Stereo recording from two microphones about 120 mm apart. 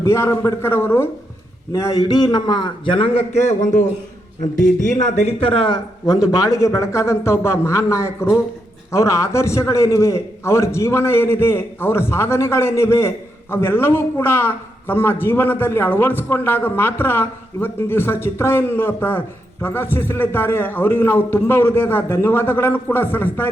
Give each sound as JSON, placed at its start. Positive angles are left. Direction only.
{"t": 0.0, "sound": "a man's voice", "side_deg": 20}
{"t": 5.0, "sound": "a man's voice", "side_deg": 65}